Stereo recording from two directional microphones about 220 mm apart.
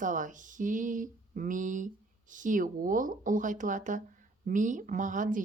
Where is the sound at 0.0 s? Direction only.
35° right (ahead or behind).